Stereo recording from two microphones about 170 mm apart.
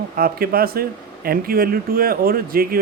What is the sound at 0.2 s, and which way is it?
Speech, 60° right (ahead or behind).